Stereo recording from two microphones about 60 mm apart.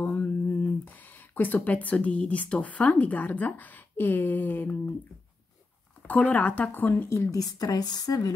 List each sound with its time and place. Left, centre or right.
0.0 s speech: left
6.0 s speech: left
7.2 s a woman's voice: left